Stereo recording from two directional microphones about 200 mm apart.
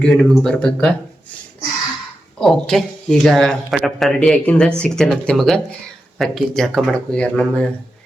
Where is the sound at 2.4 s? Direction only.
Centre (ahead or behind).